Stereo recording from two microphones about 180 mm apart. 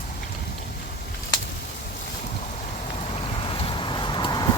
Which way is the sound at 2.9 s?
35° left (ahead or behind).